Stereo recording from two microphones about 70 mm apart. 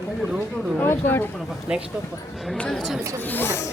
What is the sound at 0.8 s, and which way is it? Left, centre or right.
Speech, left.